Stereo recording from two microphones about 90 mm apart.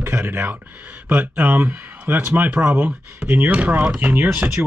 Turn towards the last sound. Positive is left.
turn(degrees=-20)  # may be behind; listen again after turning